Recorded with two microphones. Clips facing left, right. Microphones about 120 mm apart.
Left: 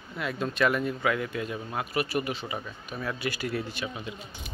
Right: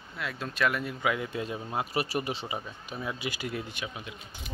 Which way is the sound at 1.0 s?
20° right (ahead or behind).